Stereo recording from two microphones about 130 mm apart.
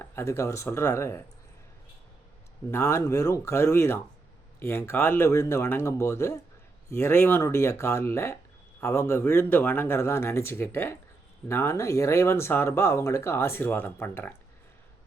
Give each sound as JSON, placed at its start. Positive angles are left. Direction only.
{"t": 0.0, "sound": "speech", "side_deg": 20}
{"t": 2.6, "sound": "speech", "side_deg": 20}